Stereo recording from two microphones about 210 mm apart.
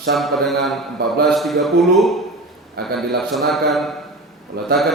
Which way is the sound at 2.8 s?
50° right (ahead or behind).